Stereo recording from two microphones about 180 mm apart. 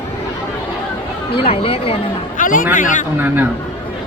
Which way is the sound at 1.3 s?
30° left (ahead or behind).